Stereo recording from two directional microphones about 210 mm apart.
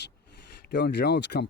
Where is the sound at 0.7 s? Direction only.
50° left (ahead or behind).